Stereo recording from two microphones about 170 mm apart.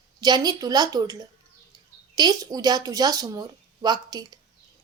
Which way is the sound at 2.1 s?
20° right (ahead or behind).